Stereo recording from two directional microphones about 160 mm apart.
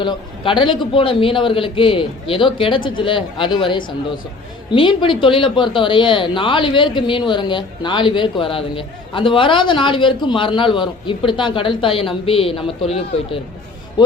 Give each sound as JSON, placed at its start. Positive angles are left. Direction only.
{"t": 0.0, "sound": "speech", "side_deg": 30}